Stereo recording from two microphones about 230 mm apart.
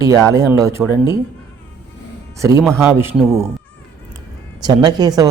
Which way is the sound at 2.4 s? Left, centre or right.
Centre.